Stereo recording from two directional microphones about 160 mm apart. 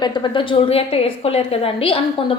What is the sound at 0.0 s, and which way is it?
A woman's voice, 25° left (ahead or behind).